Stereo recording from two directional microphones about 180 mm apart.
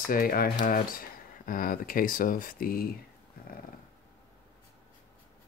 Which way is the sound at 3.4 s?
55° left (ahead or behind).